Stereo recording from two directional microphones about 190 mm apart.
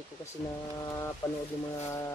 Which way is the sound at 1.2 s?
15° left (ahead or behind).